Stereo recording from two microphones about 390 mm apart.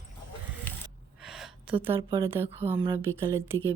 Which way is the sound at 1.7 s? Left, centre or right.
Centre.